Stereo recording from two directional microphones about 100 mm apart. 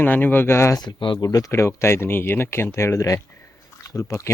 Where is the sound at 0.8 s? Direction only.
50° left (ahead or behind).